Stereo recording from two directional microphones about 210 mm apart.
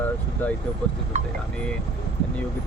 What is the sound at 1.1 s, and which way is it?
Speech, 35° right (ahead or behind).